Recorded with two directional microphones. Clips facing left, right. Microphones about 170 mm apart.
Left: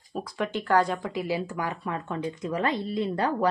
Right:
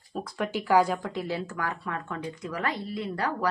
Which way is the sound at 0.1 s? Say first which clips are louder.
Left 1 dB; 5° right (ahead or behind).